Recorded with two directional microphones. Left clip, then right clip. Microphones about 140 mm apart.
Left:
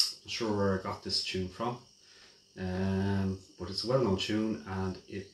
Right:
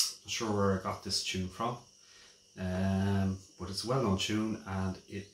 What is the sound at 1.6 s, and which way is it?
Speech, 20° right (ahead or behind).